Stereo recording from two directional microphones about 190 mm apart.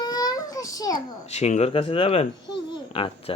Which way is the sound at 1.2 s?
35° left (ahead or behind).